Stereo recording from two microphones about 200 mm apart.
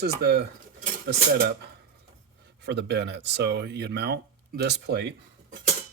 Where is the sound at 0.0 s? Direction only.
55° right (ahead or behind).